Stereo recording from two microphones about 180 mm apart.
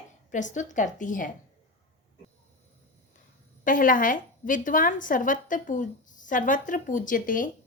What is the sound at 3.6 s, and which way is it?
A woman's voice, 50° left (ahead or behind).